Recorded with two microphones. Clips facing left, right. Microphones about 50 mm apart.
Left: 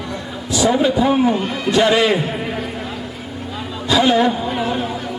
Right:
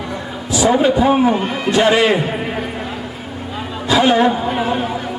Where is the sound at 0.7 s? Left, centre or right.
Centre.